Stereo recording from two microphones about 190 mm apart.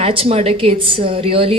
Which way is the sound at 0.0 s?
30° right (ahead or behind).